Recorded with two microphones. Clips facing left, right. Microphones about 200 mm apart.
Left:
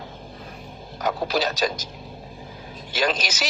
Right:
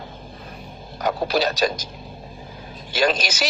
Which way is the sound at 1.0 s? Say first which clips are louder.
Right 2 dB; 60° right (ahead or behind).